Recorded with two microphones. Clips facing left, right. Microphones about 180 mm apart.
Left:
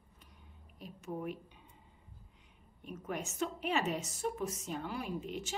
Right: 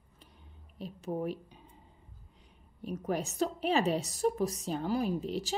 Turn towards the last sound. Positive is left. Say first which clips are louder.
# right 7 dB
turn(degrees=-35)  # may be behind; listen again after turning